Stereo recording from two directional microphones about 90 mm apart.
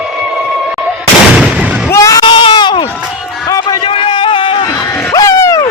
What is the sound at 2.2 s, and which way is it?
Baby cry, 65° left (ahead or behind).